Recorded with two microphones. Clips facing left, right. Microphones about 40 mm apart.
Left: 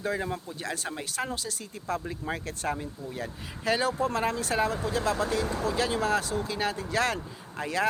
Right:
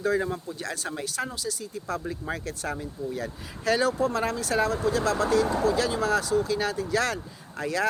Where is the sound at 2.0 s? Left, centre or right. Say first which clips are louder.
Right 1 dB; left.